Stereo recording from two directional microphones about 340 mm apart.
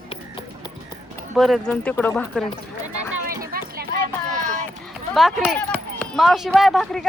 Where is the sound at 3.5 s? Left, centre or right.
Right.